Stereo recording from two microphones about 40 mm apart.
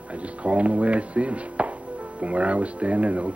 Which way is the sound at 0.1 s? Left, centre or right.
Right.